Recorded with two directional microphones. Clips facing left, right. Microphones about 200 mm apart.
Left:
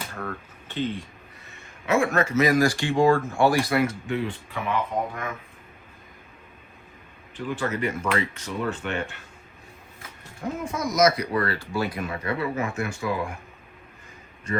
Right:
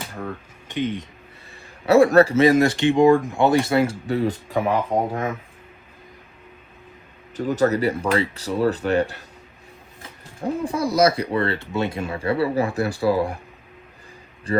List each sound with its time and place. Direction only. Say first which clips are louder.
0.7 s speech: right 3 dB; 15° right (ahead or behind)
1.9 s speech: right 9 dB; 35° right (ahead or behind)
7.3 s speech: right 8 dB; 40° right (ahead or behind)
14.5 s speech: right 7 dB; 30° right (ahead or behind)